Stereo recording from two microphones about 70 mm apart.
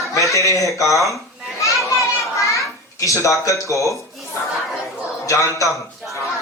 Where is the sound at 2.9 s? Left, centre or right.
Left.